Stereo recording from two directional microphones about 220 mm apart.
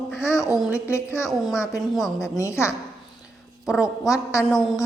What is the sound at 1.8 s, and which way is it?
Babbling, centre (ahead or behind).